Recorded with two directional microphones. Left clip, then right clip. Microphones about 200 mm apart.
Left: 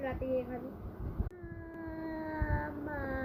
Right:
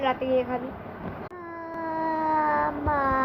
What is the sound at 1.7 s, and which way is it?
Cat, 10° left (ahead or behind).